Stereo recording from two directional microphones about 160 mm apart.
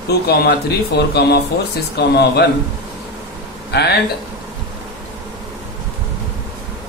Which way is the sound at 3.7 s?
90° left.